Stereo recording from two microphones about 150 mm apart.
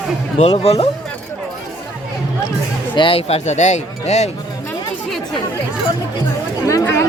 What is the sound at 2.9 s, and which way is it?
Speech, 35° left (ahead or behind).